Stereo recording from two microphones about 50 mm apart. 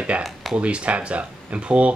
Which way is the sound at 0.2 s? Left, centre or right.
Centre.